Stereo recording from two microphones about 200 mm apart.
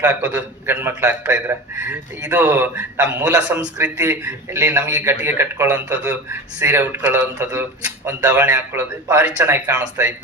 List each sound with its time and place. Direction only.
0.0 s a man's voice: 10° right (ahead or behind)